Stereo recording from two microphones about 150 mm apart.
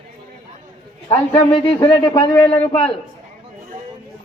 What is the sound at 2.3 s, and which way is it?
Speech, 15° left (ahead or behind).